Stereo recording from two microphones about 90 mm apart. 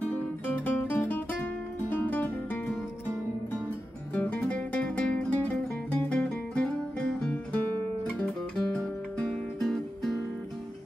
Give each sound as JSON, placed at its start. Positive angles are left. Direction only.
{"t": 0.1, "sound": "music", "side_deg": 20}
{"t": 4.1, "sound": "music", "side_deg": 15}
{"t": 8.1, "sound": "guitar", "side_deg": 15}
{"t": 9.2, "sound": "music", "side_deg": 5}